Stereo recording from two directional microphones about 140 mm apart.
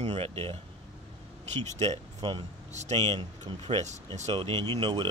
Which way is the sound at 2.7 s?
55° right (ahead or behind).